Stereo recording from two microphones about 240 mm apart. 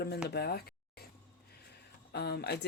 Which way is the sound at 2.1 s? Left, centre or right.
Left.